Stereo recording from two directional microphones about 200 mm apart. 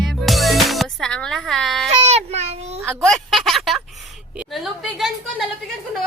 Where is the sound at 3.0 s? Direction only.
Centre (ahead or behind).